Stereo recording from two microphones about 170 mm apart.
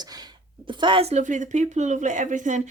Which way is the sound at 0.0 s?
25° right (ahead or behind).